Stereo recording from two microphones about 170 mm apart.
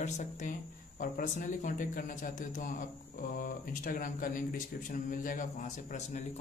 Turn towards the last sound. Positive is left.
turn(degrees=45)  # may be behind; listen again after turning